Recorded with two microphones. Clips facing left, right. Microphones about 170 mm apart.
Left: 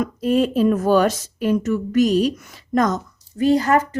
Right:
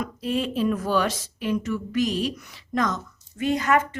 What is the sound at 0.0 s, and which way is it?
Speech, 45° left (ahead or behind).